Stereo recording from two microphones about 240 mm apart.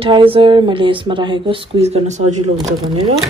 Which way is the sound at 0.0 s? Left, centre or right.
Right.